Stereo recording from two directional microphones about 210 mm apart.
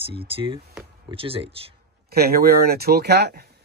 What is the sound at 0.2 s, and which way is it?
Speech, 25° right (ahead or behind).